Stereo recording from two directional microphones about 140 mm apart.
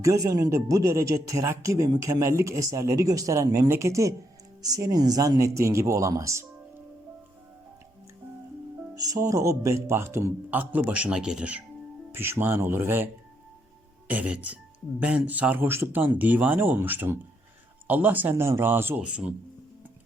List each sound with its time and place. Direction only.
0.0 s speech: 20° right (ahead or behind)
9.0 s speech: 25° right (ahead or behind)
14.1 s speech: 10° right (ahead or behind)